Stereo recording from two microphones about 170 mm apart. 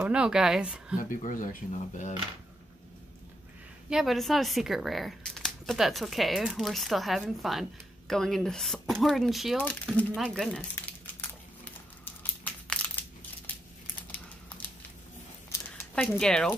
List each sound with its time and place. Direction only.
0.0 s speech: 5° right (ahead or behind)
1.2 s speech: 50° left (ahead or behind)
3.9 s speech: centre (ahead or behind)
12.0 s crushing: 10° left (ahead or behind)
15.8 s speech: 10° left (ahead or behind)